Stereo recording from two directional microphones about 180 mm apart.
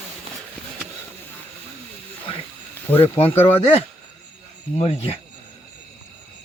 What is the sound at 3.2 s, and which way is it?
Speech, 10° left (ahead or behind).